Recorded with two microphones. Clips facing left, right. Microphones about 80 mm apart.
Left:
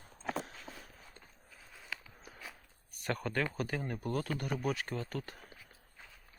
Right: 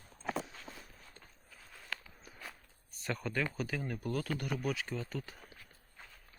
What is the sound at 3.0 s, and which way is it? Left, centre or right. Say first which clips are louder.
Speech: left 1 dB; left.